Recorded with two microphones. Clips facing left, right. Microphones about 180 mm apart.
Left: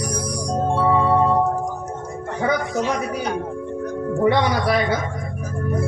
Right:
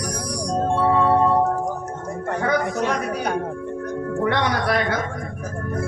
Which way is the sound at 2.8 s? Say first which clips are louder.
Even; 60° right (ahead or behind).